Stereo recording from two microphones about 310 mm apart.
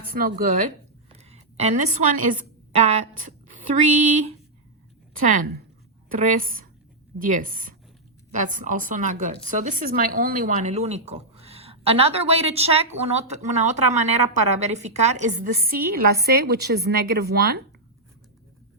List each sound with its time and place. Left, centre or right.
0.0 s a woman's voice: right
1.2 s a sound: right
6.1 s a woman's voice: right